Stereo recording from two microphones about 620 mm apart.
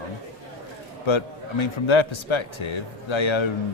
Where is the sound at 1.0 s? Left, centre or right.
Left.